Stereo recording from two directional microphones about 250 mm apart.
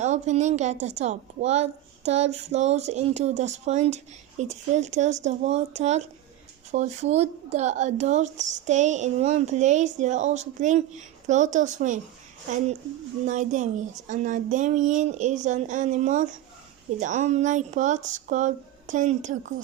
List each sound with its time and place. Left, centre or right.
0.0 s a woman's voice: right
13.2 s a woman's voice: right